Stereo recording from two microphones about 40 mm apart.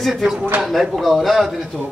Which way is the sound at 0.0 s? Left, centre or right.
Centre.